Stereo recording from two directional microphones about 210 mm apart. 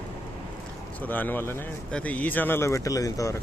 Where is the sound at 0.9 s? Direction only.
10° left (ahead or behind).